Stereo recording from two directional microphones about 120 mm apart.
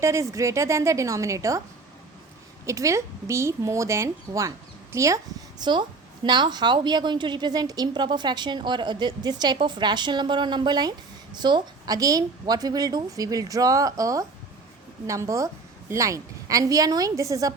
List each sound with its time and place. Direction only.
0.0 s a woman's voice: 25° right (ahead or behind)
2.6 s a woman's voice: 25° right (ahead or behind)